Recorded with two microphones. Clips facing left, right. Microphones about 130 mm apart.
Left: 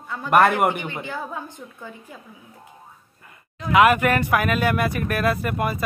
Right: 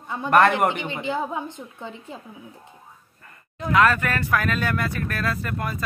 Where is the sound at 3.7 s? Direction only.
15° left (ahead or behind).